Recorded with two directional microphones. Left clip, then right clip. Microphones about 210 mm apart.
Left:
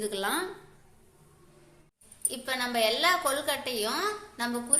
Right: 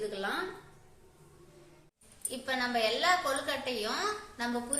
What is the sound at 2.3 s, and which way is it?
A woman's voice, 45° left (ahead or behind).